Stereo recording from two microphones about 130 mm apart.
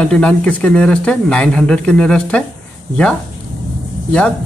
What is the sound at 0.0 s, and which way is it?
Speech, 10° left (ahead or behind).